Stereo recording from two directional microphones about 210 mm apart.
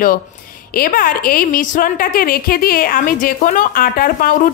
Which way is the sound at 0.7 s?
40° left (ahead or behind).